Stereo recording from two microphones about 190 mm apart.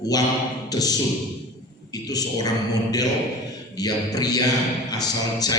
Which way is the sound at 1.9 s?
20° left (ahead or behind).